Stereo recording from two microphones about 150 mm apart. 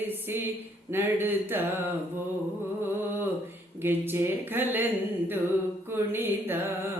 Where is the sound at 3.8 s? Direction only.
15° right (ahead or behind).